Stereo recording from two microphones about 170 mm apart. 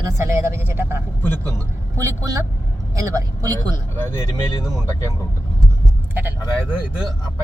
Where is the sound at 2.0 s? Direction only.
20° right (ahead or behind).